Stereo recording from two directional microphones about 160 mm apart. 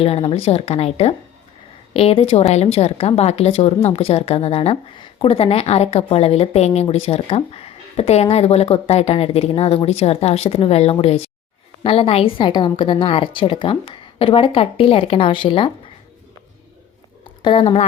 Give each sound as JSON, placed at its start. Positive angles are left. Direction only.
{"t": 0.0, "sound": "a woman's voice", "side_deg": 35}
{"t": 17.4, "sound": "a woman's voice", "side_deg": 35}